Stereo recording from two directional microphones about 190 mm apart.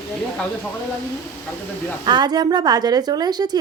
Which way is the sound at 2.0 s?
20° right (ahead or behind).